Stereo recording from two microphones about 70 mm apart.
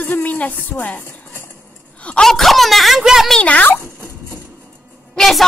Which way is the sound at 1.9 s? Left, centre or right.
Centre.